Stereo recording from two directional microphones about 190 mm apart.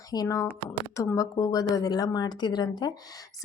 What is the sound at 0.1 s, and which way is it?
A woman's voice, 20° left (ahead or behind).